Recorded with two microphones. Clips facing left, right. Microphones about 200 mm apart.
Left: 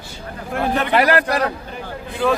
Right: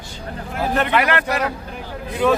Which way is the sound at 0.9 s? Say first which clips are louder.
Left 3 dB; 35° left (ahead or behind).